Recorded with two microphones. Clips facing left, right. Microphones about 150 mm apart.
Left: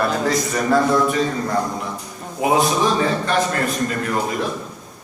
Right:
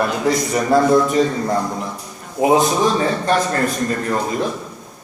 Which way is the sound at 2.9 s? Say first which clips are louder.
Right 2 dB; 35° right (ahead or behind).